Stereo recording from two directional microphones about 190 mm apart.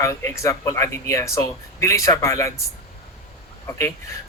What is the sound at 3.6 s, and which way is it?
Speech, 15° left (ahead or behind).